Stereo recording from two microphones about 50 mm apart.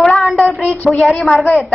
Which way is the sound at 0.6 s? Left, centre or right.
Left.